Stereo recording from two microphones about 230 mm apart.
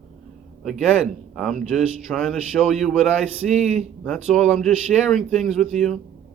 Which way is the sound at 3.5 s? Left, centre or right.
Right.